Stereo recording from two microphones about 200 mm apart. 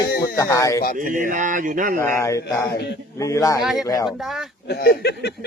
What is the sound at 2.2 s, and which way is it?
Speech, 15° left (ahead or behind).